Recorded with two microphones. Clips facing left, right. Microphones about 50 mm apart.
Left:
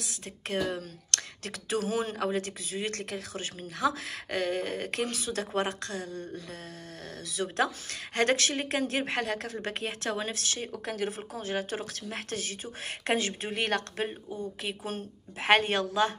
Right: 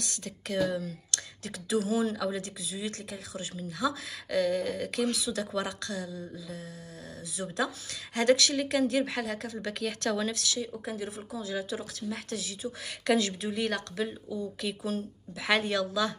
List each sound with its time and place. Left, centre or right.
0.2 s a woman's voice: left
1.1 s speech: left
6.1 s a sound: left
7.2 s speech: left
12.6 s a woman's voice: left
13.5 s a woman's voice: left